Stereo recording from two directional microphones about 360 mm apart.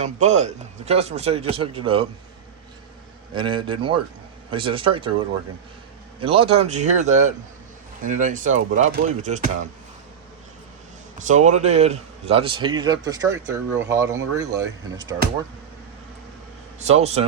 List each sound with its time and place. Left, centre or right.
0.0 s a man's voice: centre
3.3 s a man's voice: centre
6.1 s speech: centre
11.2 s a man's voice: centre
16.8 s a man's voice: centre